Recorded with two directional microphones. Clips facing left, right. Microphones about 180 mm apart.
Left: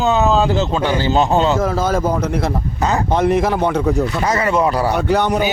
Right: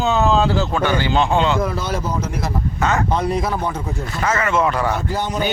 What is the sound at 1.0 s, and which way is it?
Speech, 40° left (ahead or behind).